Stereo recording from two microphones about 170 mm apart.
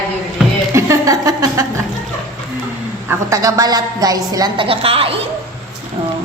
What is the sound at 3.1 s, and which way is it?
A woman's voice, 20° right (ahead or behind).